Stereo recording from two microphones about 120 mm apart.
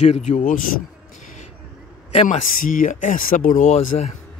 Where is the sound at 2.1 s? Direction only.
75° left (ahead or behind).